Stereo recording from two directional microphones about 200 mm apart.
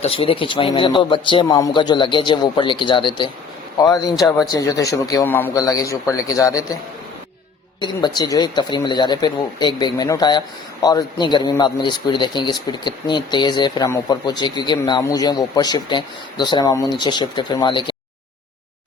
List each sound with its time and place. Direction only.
0.0 s a man's voice: 30° left (ahead or behind)
7.8 s a man's voice: 20° left (ahead or behind)